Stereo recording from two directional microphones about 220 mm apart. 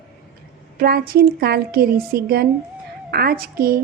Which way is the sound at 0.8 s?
45° right (ahead or behind).